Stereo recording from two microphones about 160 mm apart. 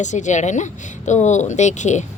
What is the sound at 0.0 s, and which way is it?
Speech, 50° left (ahead or behind).